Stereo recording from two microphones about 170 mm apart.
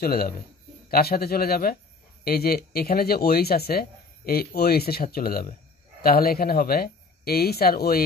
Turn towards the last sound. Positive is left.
turn(degrees=65)  # may be behind; listen again after turning